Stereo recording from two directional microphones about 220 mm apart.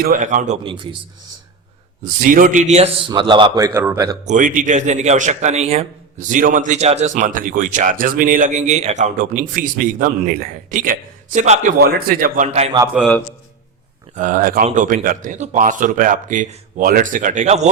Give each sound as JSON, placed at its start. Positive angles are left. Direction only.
{"t": 0.0, "sound": "a man's voice", "side_deg": -40}
{"t": 2.2, "sound": "a man's voice", "side_deg": -35}
{"t": 4.3, "sound": "a man's voice", "side_deg": -35}
{"t": 11.8, "sound": "a man's voice", "side_deg": -45}
{"t": 12.9, "sound": "a man's voice", "side_deg": 5}
{"t": 14.2, "sound": "a man's voice", "side_deg": -35}